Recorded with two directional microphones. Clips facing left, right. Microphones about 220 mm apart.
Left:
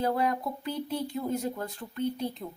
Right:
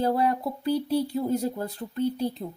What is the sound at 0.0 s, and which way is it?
Speech, 35° right (ahead or behind).